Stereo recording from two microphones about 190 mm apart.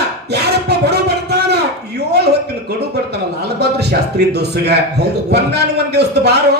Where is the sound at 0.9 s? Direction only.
60° right (ahead or behind).